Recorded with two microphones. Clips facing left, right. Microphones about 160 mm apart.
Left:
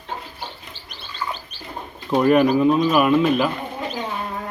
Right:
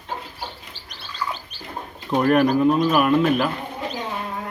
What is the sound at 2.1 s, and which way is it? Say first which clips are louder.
Speech: left 2 dB; 5° left (ahead or behind).